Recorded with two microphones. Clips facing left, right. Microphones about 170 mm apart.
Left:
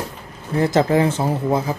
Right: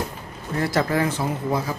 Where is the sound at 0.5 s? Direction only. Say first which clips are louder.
Left 6 dB; 25° left (ahead or behind).